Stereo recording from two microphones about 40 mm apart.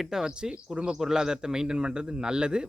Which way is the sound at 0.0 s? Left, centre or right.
Centre.